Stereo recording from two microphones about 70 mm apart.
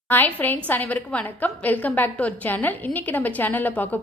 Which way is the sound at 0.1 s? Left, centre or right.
Left.